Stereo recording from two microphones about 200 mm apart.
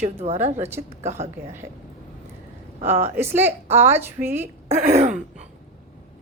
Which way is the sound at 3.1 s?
10° right (ahead or behind).